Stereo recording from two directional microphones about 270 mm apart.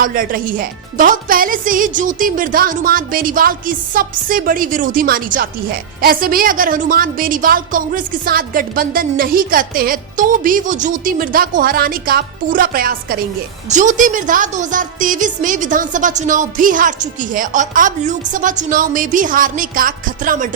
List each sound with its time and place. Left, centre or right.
0.0 s a woman's voice: right